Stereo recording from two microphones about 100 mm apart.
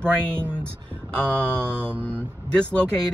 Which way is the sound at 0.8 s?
10° left (ahead or behind).